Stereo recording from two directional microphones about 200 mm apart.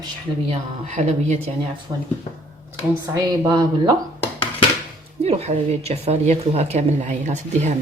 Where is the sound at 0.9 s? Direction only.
35° right (ahead or behind).